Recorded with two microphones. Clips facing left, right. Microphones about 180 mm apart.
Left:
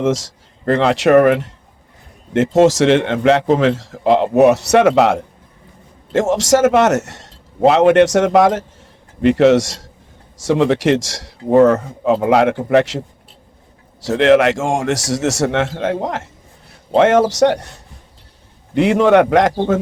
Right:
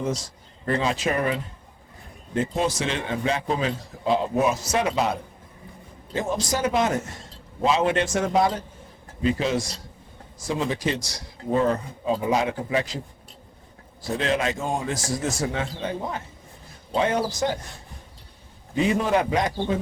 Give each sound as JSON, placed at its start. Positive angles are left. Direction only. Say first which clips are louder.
{"t": 0.0, "sound": "a man's voice", "louder": "left 10 dB", "side_deg": 90}
{"t": 10.3, "sound": "a man's voice", "louder": "left 12 dB", "side_deg": 75}
{"t": 11.4, "sound": "a man's voice", "louder": "left 11 dB", "side_deg": 75}
{"t": 14.0, "sound": "a man's voice", "louder": "left 13 dB", "side_deg": 80}
{"t": 18.7, "sound": "a man's voice", "louder": "left 10 dB", "side_deg": 75}